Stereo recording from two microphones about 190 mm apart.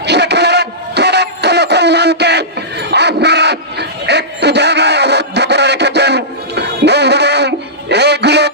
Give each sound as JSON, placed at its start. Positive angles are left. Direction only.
{"t": 0.0, "sound": "music", "side_deg": -65}